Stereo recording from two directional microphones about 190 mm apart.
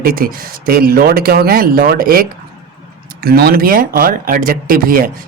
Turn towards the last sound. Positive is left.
turn(degrees=-45)  # may be behind; listen again after turning